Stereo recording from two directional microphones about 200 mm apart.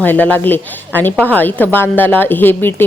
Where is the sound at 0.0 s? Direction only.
10° left (ahead or behind).